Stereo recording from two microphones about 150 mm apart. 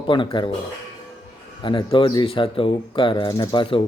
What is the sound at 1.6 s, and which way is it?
Speech, 35° left (ahead or behind).